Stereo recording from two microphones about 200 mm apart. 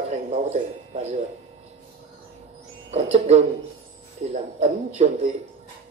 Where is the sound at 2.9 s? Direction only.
30° right (ahead or behind).